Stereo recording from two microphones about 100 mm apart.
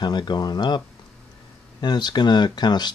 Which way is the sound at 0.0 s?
50° left (ahead or behind).